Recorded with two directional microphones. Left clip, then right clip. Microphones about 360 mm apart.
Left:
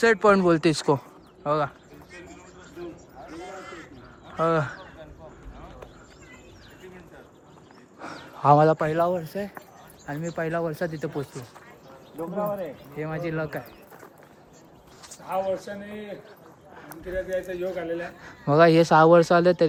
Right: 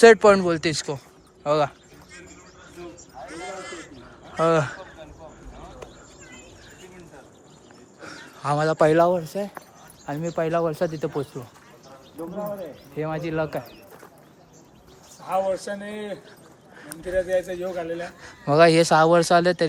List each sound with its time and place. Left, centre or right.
0.0 s a man's voice: centre
3.2 s crow: right
4.4 s a man's voice: centre
8.0 s a sound: centre
8.8 s speech: centre
13.0 s speech: centre
15.3 s speech: right
15.7 s speech: centre
17.6 s a man's voice: centre